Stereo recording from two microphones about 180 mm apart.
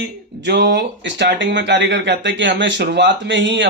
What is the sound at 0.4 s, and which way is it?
Speech, 65° right (ahead or behind).